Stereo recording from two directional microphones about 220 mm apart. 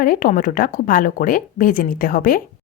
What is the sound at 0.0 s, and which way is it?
Speech, 40° left (ahead or behind).